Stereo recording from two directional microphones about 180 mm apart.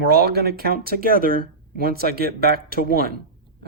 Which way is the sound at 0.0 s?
65° right (ahead or behind).